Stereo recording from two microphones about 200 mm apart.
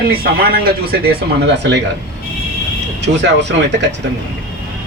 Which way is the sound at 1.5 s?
60° right (ahead or behind).